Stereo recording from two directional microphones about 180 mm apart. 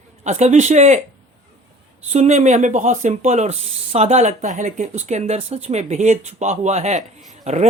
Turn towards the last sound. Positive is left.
turn(degrees=-35)  # may be behind; listen again after turning